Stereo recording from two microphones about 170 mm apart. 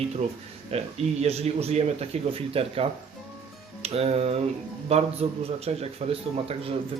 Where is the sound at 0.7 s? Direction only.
40° right (ahead or behind).